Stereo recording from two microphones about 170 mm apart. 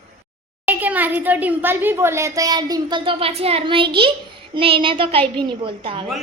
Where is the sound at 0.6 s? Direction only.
10° right (ahead or behind); by 6.1 s 30° right (ahead or behind).